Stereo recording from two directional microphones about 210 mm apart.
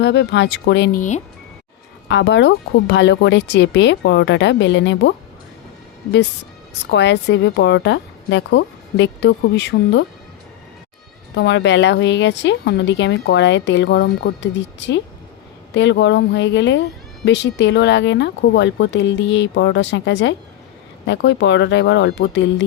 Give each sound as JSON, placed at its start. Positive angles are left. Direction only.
{"t": 0.0, "sound": "a woman's voice", "side_deg": 55}
{"t": 0.9, "sound": "speech", "side_deg": 35}
{"t": 2.0, "sound": "a woman's voice", "side_deg": 60}
{"t": 6.9, "sound": "a woman's voice", "side_deg": 55}
{"t": 11.3, "sound": "a woman's voice", "side_deg": 55}